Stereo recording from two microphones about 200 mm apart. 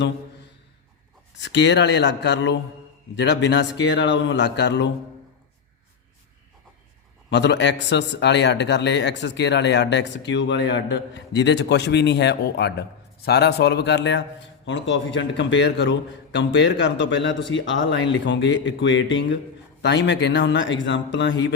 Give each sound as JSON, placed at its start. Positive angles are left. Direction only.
{"t": 1.4, "sound": "speech", "side_deg": 60}
{"t": 7.3, "sound": "speech", "side_deg": 60}